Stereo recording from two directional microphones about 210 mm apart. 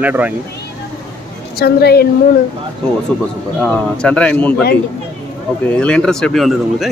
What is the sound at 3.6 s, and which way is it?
Speech, 5° left (ahead or behind).